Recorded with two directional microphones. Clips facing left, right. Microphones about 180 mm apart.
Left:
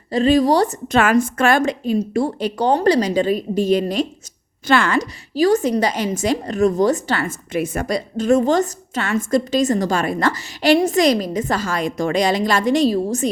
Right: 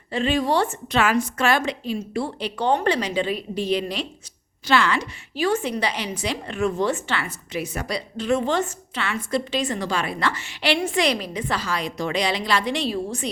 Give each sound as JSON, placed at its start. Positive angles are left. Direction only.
{"t": 0.1, "sound": "a woman's voice", "side_deg": 40}